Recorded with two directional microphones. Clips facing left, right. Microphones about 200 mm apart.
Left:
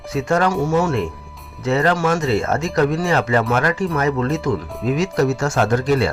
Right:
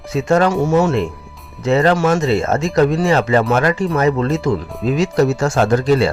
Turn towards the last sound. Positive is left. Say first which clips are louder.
# right 3 dB
turn(degrees=-30)  # may be behind; listen again after turning